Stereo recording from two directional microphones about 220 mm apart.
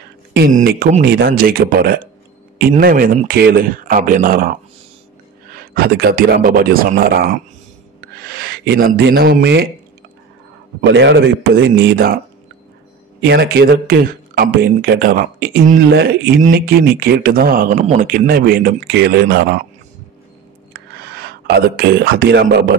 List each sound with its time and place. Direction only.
0.3 s speech: 40° right (ahead or behind)
10.8 s speech: 50° right (ahead or behind)
13.2 s speech: 50° right (ahead or behind)
20.7 s speech: 45° right (ahead or behind)